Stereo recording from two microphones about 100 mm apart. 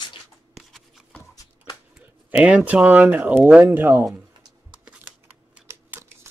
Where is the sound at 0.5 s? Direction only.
Centre (ahead or behind).